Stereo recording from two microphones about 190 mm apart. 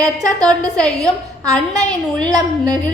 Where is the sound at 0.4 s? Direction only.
5° left (ahead or behind).